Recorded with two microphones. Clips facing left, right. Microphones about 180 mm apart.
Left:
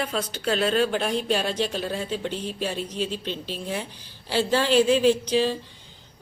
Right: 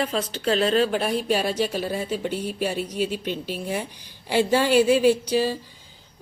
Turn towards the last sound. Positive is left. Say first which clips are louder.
# right 1 dB
turn(degrees=-10)  # may be behind; listen again after turning